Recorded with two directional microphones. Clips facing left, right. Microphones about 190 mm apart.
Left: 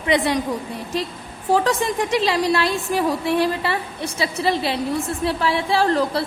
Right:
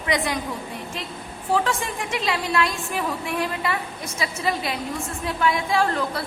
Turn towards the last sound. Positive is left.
turn(degrees=35)  # may be behind; listen again after turning